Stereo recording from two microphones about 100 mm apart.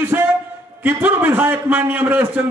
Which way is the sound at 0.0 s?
25° right (ahead or behind).